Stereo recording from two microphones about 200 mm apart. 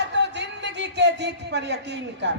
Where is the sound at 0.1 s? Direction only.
60° right (ahead or behind).